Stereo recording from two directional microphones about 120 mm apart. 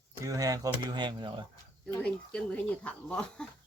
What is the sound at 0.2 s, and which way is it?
Speech, 30° right (ahead or behind).